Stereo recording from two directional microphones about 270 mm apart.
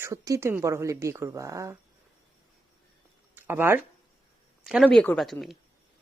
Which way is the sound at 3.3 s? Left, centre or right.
Centre.